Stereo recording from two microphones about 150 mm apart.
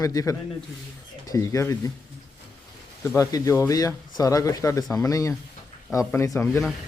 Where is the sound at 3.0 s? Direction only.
20° left (ahead or behind).